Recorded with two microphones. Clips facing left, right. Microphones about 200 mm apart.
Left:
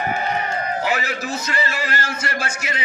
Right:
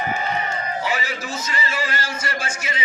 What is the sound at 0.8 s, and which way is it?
A man's voice, 60° left (ahead or behind).